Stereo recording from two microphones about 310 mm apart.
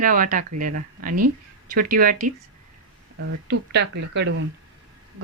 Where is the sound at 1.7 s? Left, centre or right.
Right.